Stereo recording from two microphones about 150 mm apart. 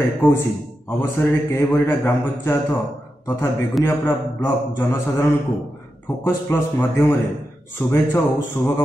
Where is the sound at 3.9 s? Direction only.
15° left (ahead or behind).